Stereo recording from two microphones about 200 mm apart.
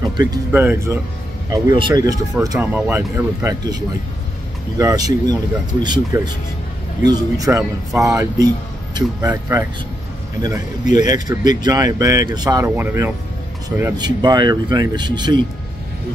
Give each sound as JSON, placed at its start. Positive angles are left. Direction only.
{"t": 0.5, "sound": "speech", "side_deg": -10}